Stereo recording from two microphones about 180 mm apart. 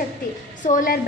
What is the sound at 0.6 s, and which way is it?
Speech, 45° left (ahead or behind).